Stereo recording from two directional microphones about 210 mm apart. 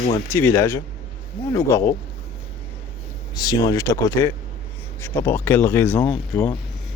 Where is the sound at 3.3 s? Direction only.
20° left (ahead or behind).